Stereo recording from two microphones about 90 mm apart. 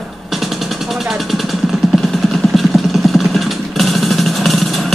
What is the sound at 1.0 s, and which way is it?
Speech, centre (ahead or behind).